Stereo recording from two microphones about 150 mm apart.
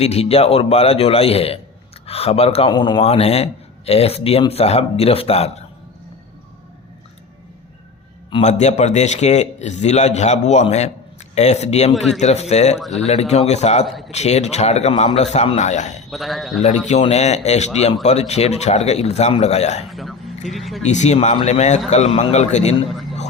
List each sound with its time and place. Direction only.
0.0 s a man's voice: 45° left (ahead or behind)
2.6 s speech: 30° left (ahead or behind)
3.0 s speech: 40° left (ahead or behind)
8.3 s speech: 45° left (ahead or behind)
11.9 s a man's voice: centre (ahead or behind)
12.2 s speech: 45° left (ahead or behind)
12.8 s a man's voice: centre (ahead or behind)
13.1 s speech: 45° left (ahead or behind)
16.0 s a man's voice: centre (ahead or behind)
16.6 s speech: 45° left (ahead or behind)
19.9 s speech: centre (ahead or behind)
20.8 s speech: 50° left (ahead or behind)